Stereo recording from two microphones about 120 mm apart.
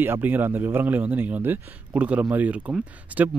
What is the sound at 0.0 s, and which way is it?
Speech, 15° right (ahead or behind).